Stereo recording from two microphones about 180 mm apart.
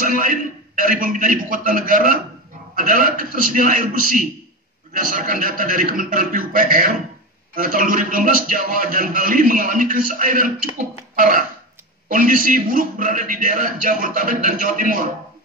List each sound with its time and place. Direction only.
0.0 s a man's voice: 50° right (ahead or behind)